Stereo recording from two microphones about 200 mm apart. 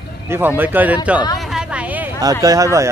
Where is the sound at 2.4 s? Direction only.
15° right (ahead or behind).